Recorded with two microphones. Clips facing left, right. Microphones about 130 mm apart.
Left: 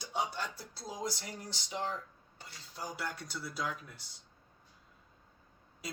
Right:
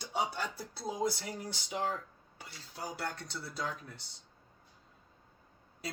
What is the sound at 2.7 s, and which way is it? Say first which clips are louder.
Speech: right 1 dB; 65° right (ahead or behind).